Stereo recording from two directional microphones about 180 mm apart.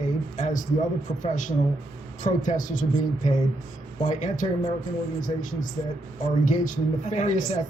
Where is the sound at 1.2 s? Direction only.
45° left (ahead or behind).